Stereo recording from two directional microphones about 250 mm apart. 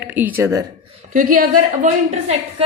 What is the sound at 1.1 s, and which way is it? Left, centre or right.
Speech, right.